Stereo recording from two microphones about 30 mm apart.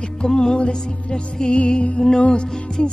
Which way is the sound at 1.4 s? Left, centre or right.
Left.